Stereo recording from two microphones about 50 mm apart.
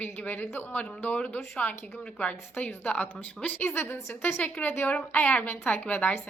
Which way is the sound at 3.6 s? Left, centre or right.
Left.